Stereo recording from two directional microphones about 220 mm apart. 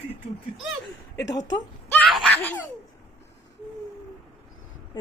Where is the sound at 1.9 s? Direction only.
Centre (ahead or behind).